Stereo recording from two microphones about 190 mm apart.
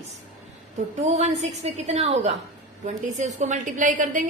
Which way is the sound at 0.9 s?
35° right (ahead or behind).